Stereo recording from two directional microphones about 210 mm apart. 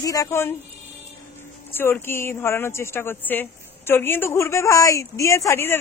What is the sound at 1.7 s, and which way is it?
Speech, 10° left (ahead or behind).